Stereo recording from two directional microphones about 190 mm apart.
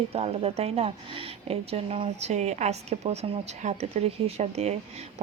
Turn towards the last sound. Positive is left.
turn(degrees=-35)  # may be behind; listen again after turning